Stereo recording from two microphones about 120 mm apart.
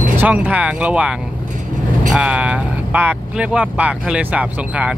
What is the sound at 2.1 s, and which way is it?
Speech, 10° right (ahead or behind).